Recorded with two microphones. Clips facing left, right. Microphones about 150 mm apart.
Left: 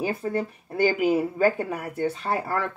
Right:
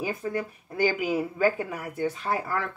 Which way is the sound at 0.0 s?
30° left (ahead or behind).